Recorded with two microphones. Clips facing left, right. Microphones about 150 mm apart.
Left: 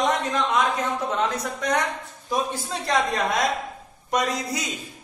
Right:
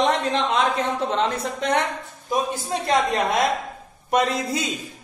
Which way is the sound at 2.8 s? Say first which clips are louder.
Right 2 dB; 25° right (ahead or behind).